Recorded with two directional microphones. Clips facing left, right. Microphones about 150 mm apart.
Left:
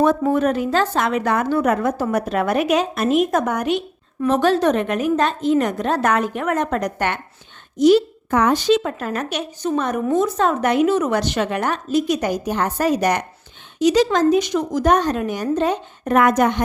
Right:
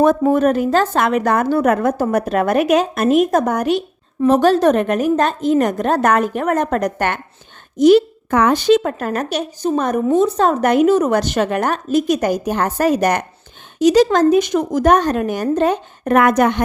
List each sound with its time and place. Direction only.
0.0 s speech: 45° right (ahead or behind)
10.1 s speech: 30° right (ahead or behind); by 16.6 s 65° right (ahead or behind)